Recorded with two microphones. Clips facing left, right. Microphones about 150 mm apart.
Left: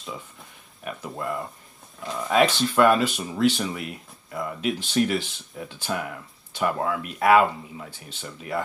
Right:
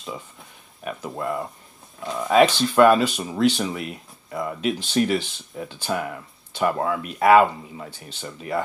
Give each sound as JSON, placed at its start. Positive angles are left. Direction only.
{"t": 1.1, "sound": "speech", "side_deg": 0}